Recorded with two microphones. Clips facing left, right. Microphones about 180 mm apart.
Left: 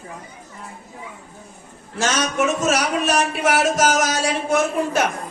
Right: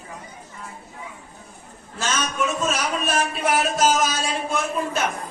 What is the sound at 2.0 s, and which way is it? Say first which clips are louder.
A man's voice: left 5 dB; 80° left.